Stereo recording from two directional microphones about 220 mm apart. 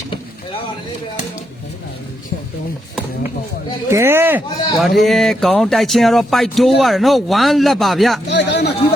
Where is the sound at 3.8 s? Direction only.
10° right (ahead or behind).